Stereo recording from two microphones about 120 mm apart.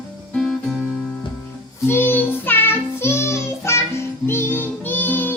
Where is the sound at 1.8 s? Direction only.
20° left (ahead or behind).